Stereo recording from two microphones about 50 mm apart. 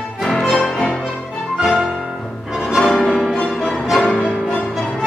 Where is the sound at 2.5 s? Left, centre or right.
Centre.